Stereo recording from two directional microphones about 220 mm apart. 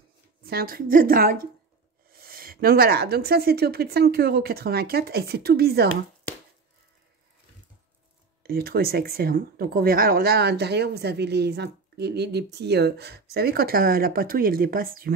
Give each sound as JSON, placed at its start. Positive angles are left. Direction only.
{"t": 0.4, "sound": "a woman's voice", "side_deg": -45}
{"t": 8.4, "sound": "speech", "side_deg": -45}